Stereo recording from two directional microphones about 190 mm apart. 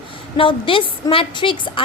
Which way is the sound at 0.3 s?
25° left (ahead or behind).